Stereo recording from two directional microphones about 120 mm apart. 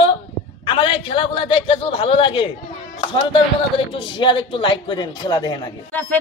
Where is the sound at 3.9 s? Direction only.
45° left (ahead or behind).